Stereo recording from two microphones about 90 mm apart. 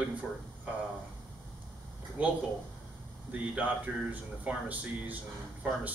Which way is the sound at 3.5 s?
15° right (ahead or behind).